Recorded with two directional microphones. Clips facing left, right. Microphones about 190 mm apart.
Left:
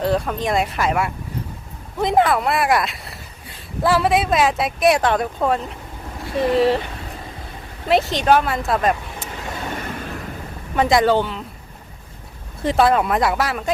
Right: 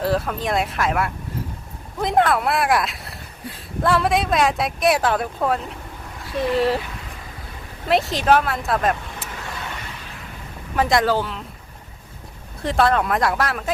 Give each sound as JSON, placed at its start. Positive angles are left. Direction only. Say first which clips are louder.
{"t": 0.0, "sound": "speech", "louder": "left 2 dB", "side_deg": 0}
{"t": 7.9, "sound": "speech", "louder": "left 1 dB", "side_deg": 0}
{"t": 9.7, "sound": "a sound", "louder": "left 8 dB", "side_deg": 50}
{"t": 10.8, "sound": "speech", "louder": "left 3 dB", "side_deg": 0}
{"t": 12.6, "sound": "speech", "louder": "left 2 dB", "side_deg": 5}